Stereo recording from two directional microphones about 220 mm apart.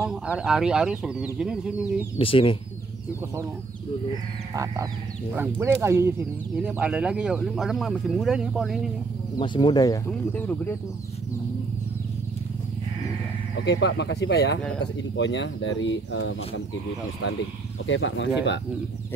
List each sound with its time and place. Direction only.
0.4 s speech: 5° right (ahead or behind)
2.1 s speech: 25° left (ahead or behind)
5.3 s speech: 10° right (ahead or behind)
9.4 s speech: 20° left (ahead or behind)
13.6 s speech: 50° left (ahead or behind)
17.8 s speech: 60° left (ahead or behind)